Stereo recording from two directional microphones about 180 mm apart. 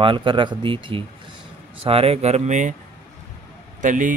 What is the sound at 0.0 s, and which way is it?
Speech, 25° right (ahead or behind).